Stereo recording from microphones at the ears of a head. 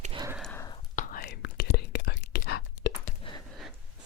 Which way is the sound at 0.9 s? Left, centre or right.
Left.